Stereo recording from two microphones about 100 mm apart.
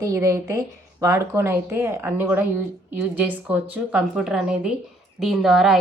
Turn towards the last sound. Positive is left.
turn(degrees=-5)  # may be behind; listen again after turning